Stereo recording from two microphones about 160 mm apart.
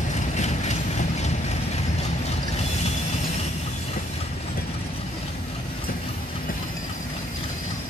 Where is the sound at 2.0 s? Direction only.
40° left (ahead or behind).